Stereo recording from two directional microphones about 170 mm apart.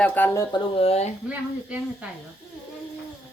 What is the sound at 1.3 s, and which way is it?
Speech, 10° right (ahead or behind).